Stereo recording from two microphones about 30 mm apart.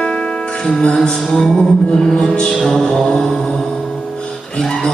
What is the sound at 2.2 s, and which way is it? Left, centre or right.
Music, left.